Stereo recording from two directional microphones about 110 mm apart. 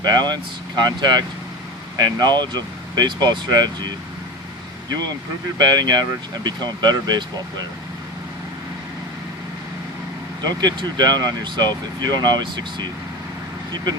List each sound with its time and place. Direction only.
0.0 s speech: 40° right (ahead or behind)
5.5 s speech: 40° right (ahead or behind)
10.4 s speech: 40° right (ahead or behind)